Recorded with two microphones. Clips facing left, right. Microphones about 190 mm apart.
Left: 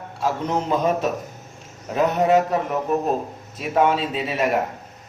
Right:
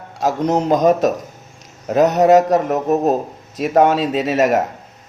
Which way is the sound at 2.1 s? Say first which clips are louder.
Right 6 dB; 40° right (ahead or behind).